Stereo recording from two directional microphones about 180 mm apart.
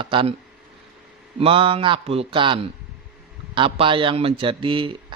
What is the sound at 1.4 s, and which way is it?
Speech, 30° right (ahead or behind).